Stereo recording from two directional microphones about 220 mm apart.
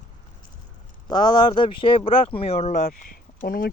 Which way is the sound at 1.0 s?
20° left (ahead or behind).